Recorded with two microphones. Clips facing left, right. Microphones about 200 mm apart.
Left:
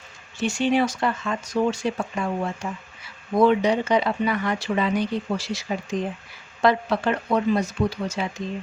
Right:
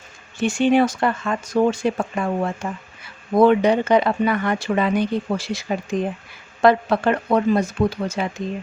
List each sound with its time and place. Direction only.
0.3 s speech: 55° right (ahead or behind)